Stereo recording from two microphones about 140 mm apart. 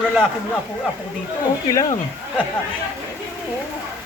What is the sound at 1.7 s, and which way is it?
Speech, 25° left (ahead or behind).